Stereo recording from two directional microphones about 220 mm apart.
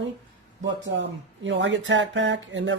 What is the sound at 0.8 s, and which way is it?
Speech, 55° right (ahead or behind).